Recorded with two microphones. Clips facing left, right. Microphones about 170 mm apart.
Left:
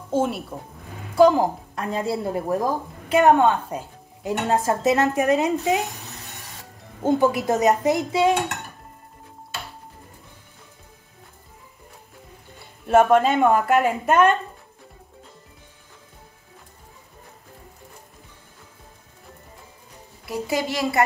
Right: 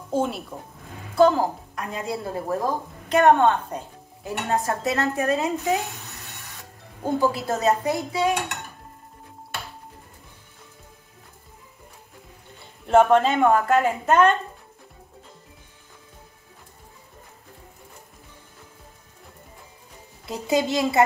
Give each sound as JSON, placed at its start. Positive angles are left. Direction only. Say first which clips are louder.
{"t": 0.1, "sound": "speech", "louder": "left 2 dB", "side_deg": 5}
{"t": 1.1, "sound": "a woman's voice", "louder": "left 2 dB", "side_deg": 15}
{"t": 1.8, "sound": "a woman's voice", "louder": "left 5 dB", "side_deg": 35}
{"t": 2.2, "sound": "speech", "louder": "left 3 dB", "side_deg": 15}
{"t": 4.2, "sound": "speech", "louder": "left 3 dB", "side_deg": 20}
{"t": 7.0, "sound": "speech", "louder": "left 4 dB", "side_deg": 20}
{"t": 12.8, "sound": "speech", "louder": "left 1 dB", "side_deg": 10}
{"t": 20.2, "sound": "speech", "louder": "right 2 dB", "side_deg": -20}